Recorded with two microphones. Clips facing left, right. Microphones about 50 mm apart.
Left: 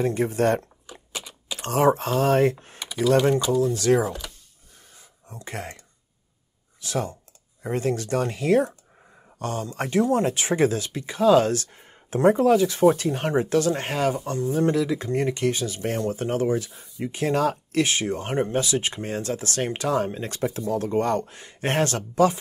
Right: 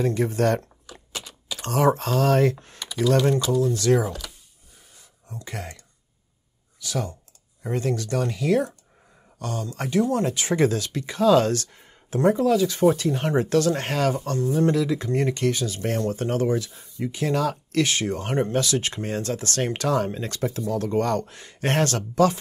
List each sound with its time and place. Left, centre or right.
0.0 s speech: left
1.1 s typing: left
1.7 s speech: left
2.6 s computer keyboard: left
3.3 s speech: left
5.3 s speech: left
16.7 s a sound: centre
17.0 s speech: left